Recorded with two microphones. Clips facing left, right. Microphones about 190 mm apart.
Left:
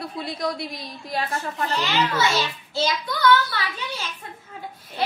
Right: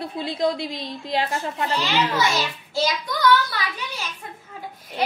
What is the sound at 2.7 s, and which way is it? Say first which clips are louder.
Speech: right 2 dB; 10° right (ahead or behind).